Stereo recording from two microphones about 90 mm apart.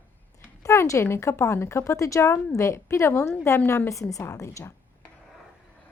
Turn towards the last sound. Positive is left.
turn(degrees=35)  # may be behind; listen again after turning